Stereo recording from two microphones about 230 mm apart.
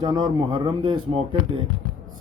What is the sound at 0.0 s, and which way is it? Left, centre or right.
Speech, centre.